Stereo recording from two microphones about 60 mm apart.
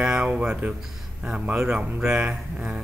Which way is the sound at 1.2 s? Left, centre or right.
Centre.